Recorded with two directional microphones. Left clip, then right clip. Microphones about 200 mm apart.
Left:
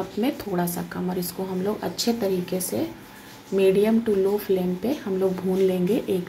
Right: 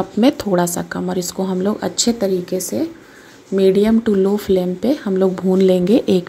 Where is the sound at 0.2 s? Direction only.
40° right (ahead or behind).